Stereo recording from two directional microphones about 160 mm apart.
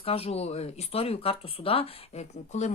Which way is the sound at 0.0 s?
40° left (ahead or behind).